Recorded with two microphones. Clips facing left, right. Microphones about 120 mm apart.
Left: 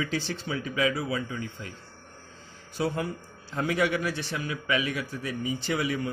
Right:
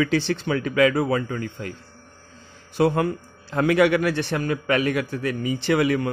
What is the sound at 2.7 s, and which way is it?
A man's voice, 60° right (ahead or behind).